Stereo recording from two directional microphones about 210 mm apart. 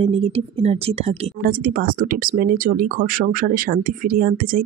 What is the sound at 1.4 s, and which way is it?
Speech, 45° right (ahead or behind).